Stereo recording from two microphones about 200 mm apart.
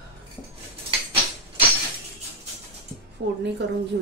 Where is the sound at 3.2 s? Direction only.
55° right (ahead or behind).